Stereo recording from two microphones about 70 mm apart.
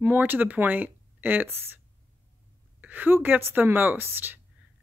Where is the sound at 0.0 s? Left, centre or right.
Right.